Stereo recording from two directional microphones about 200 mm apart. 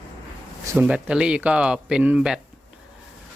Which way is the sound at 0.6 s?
10° right (ahead or behind).